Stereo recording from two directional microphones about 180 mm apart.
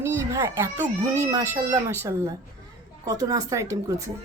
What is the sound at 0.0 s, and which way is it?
A child's voice, 15° right (ahead or behind).